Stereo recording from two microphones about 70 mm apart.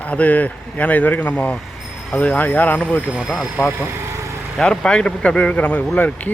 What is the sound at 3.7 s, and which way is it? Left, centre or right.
Speech, right.